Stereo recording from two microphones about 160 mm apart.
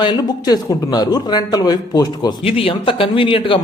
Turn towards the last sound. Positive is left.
turn(degrees=35)  # may be behind; listen again after turning